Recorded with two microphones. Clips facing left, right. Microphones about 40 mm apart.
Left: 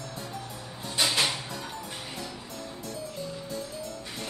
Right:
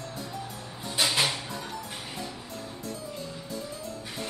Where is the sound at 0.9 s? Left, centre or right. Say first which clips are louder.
Even; centre.